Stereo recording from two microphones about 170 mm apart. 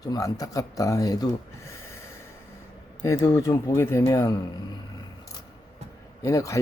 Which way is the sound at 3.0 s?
20° left (ahead or behind).